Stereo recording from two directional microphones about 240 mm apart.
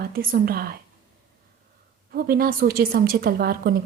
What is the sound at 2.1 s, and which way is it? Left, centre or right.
Speech, right.